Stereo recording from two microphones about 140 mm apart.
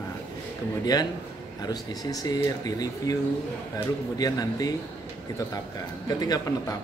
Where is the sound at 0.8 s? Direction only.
30° left (ahead or behind).